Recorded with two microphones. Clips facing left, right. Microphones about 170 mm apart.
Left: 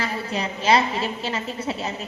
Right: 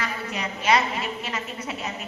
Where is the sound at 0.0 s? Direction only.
30° left (ahead or behind).